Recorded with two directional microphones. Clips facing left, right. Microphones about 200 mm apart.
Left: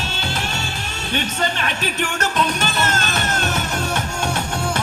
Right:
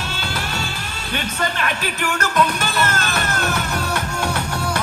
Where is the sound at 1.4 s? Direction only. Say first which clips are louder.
Even; 25° left (ahead or behind).